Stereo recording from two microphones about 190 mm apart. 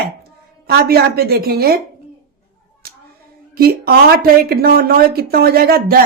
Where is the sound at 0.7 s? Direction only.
55° right (ahead or behind).